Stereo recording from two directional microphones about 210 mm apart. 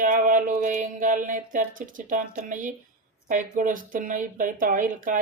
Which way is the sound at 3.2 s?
40° right (ahead or behind).